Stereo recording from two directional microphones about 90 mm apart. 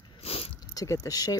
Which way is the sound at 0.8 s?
45° left (ahead or behind).